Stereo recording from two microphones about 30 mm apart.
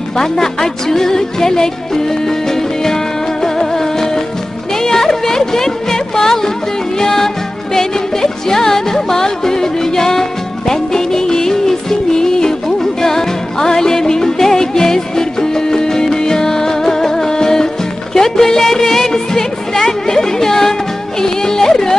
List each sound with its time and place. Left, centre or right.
0.2 s music: centre